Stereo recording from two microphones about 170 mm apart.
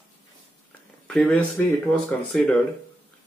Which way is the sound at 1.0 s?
5° left (ahead or behind).